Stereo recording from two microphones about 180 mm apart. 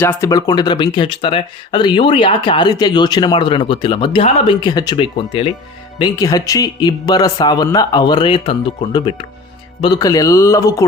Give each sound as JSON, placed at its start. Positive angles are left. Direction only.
{"t": 0.0, "sound": "speech", "side_deg": 15}